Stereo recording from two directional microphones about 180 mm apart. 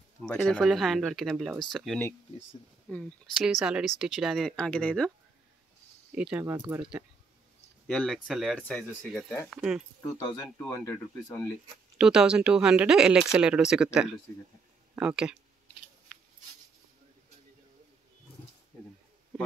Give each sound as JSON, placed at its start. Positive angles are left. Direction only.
{"t": 0.2, "sound": "speech", "side_deg": 5}
{"t": 6.1, "sound": "speech", "side_deg": -10}
{"t": 7.8, "sound": "speech", "side_deg": 5}
{"t": 9.5, "sound": "speech", "side_deg": -5}
{"t": 10.1, "sound": "speech", "side_deg": 20}
{"t": 12.0, "sound": "speech", "side_deg": -5}